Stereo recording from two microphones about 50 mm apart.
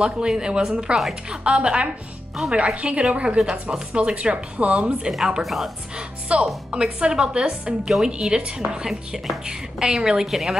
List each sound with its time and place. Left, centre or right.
0.0 s a woman's voice: centre
5.4 s a woman's voice: centre
5.9 s a woman's voice: right; by 10.6 s centre